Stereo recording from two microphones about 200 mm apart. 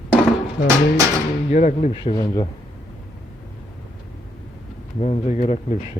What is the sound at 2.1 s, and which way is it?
Speech, 20° left (ahead or behind).